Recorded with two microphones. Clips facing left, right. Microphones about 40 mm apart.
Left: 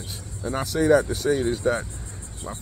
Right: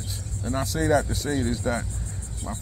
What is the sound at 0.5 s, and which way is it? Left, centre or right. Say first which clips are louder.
Speech: left 4 dB; left.